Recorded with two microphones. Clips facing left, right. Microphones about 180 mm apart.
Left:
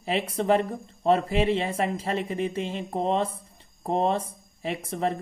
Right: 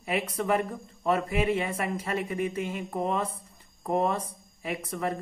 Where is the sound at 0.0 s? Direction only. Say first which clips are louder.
Left 3 dB; 30° left (ahead or behind).